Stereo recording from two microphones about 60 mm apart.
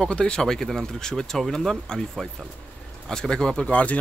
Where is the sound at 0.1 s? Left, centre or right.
Centre.